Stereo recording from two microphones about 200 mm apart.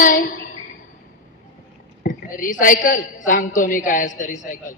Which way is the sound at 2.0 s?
45° left (ahead or behind).